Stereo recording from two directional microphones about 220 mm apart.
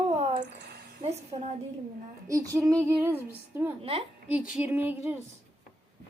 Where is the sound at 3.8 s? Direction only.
25° right (ahead or behind).